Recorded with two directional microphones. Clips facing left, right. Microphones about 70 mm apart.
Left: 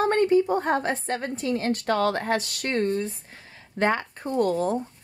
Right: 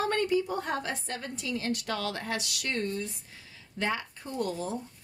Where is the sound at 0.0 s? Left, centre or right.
Left.